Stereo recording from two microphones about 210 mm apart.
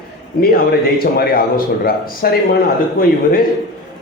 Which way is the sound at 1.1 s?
45° left (ahead or behind).